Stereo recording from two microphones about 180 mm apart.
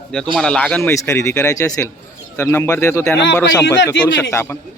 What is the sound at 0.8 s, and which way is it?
Speech, 15° left (ahead or behind).